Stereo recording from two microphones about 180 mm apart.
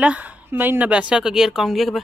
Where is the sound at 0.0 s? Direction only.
10° right (ahead or behind).